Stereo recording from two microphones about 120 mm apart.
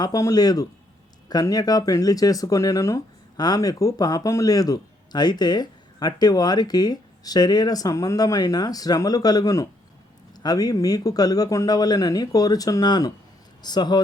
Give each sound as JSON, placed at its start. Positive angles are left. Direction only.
{"t": 0.0, "sound": "speech", "side_deg": 30}